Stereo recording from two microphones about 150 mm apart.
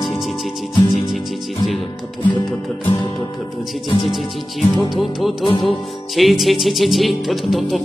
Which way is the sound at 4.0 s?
Centre (ahead or behind).